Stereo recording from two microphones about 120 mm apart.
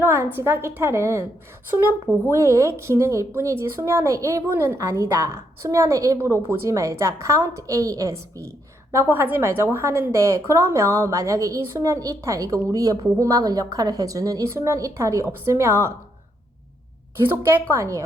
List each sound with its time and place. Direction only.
0.0 s a woman's voice: 15° right (ahead or behind)
17.2 s a woman's voice: 20° right (ahead or behind)